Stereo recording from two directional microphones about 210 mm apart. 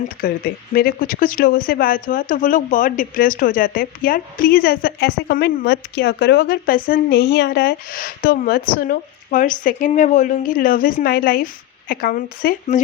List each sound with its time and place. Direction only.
0.2 s speech: 45° left (ahead or behind)